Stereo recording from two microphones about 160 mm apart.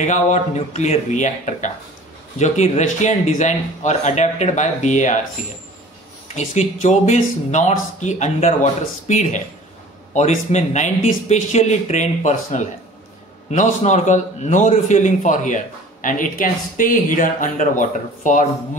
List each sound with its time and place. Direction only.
0.0 s a man's voice: 45° left (ahead or behind)
6.2 s a man's voice: 45° left (ahead or behind)